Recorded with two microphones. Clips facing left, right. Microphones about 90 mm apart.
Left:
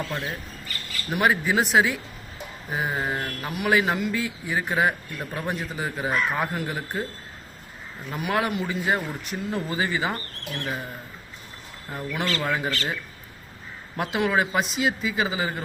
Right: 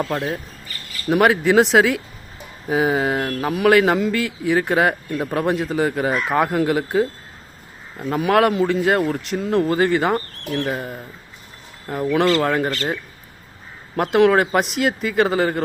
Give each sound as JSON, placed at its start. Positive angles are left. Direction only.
{"t": 1.1, "sound": "speech", "side_deg": -85}
{"t": 8.1, "sound": "a man's voice", "side_deg": -75}
{"t": 13.9, "sound": "a man's voice", "side_deg": -65}